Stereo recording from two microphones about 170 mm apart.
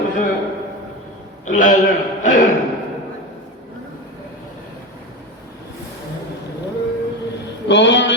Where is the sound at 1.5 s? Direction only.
55° left (ahead or behind).